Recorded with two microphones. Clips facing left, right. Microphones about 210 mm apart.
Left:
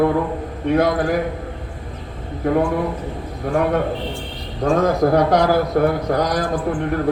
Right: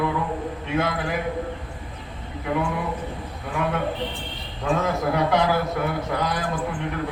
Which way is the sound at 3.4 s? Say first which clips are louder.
Left 7 dB; 45° left (ahead or behind).